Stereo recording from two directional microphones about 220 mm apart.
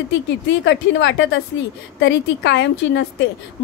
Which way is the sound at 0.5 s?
55° left (ahead or behind).